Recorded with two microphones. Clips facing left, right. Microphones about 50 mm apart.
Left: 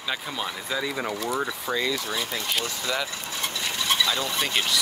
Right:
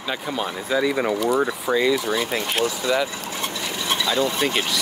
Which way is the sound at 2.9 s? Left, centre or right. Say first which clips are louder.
Right 6 dB; centre.